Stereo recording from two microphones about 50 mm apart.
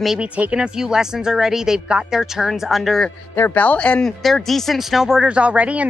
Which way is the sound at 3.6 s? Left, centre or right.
Left.